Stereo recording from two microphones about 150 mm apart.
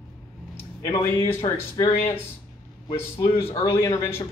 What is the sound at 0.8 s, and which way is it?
Speech, 20° left (ahead or behind).